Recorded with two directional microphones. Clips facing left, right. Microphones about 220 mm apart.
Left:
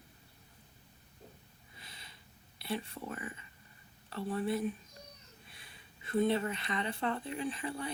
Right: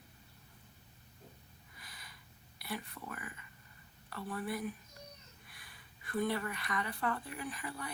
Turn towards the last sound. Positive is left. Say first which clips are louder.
# left 6 dB
turn(degrees=25)  # may be behind; listen again after turning